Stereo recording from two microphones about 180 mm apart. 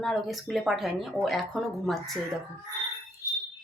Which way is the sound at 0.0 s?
Centre (ahead or behind).